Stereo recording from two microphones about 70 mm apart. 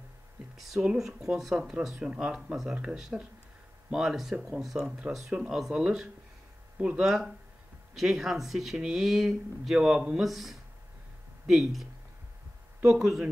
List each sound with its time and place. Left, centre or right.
0.6 s speech: centre
3.1 s speech: centre
3.9 s speech: centre